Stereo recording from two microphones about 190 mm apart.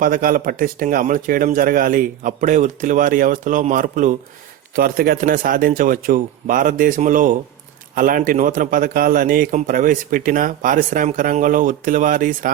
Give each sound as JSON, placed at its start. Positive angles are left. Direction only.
{"t": 0.0, "sound": "a man's voice", "side_deg": -45}